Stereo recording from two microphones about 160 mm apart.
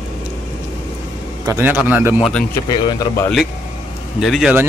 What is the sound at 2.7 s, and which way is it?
Speech, 25° left (ahead or behind).